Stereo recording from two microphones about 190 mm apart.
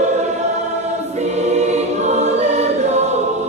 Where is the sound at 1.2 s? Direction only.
35° right (ahead or behind).